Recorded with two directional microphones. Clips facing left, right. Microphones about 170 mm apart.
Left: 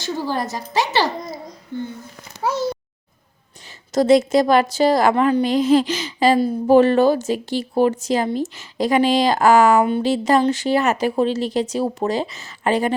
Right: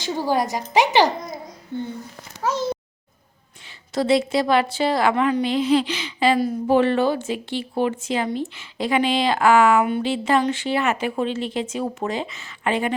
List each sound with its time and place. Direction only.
0.0 s a woman's voice: 15° right (ahead or behind)
3.9 s speech: 45° left (ahead or behind)